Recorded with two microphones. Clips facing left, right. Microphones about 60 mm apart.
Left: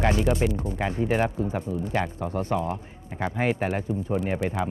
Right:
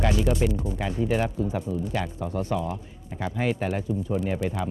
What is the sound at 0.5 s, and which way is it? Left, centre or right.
Speech, left.